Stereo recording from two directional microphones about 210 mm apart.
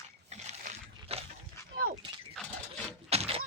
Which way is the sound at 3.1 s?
30° right (ahead or behind).